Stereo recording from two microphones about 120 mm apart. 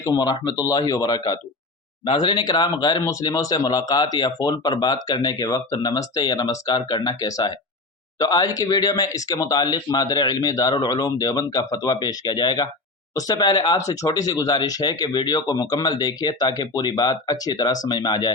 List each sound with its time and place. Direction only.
0.0 s speech: 35° left (ahead or behind)